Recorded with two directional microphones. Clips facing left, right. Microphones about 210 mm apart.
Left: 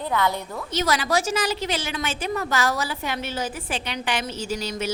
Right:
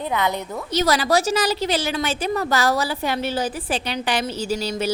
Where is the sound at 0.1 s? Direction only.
20° right (ahead or behind).